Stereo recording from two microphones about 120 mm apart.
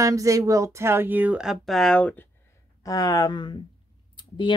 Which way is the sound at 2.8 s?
30° left (ahead or behind).